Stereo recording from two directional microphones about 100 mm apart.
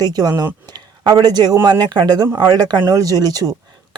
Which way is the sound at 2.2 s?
30° right (ahead or behind).